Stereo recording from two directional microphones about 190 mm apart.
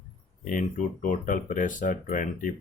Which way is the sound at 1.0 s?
45° left (ahead or behind).